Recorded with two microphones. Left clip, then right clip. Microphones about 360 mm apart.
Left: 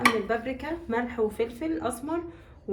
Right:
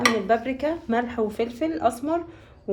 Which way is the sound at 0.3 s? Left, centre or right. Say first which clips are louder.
Right 7 dB; right.